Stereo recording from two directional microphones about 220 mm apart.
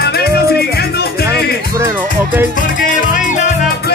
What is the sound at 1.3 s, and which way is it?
Music, 10° right (ahead or behind).